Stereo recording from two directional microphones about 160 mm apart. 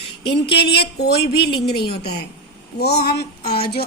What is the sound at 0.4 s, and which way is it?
A woman's voice, 90° left.